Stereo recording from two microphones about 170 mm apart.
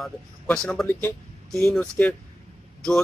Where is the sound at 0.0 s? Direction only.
5° left (ahead or behind).